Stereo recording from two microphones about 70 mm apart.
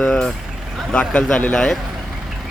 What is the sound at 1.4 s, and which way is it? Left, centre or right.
Speech, left.